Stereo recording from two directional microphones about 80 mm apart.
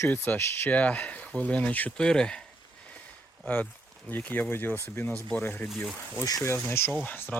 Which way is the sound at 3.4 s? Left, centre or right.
Centre.